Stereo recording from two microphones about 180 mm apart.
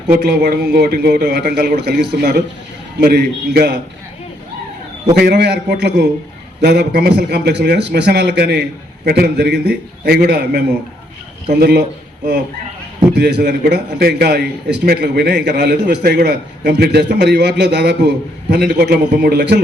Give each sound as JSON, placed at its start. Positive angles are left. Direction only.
{"t": 0.2, "sound": "a man's voice", "side_deg": -65}
{"t": 5.1, "sound": "a man's voice", "side_deg": -60}
{"t": 13.1, "sound": "a man's voice", "side_deg": -65}